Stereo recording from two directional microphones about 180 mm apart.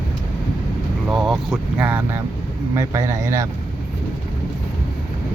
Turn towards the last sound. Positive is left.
turn(degrees=-15)  # may be behind; listen again after turning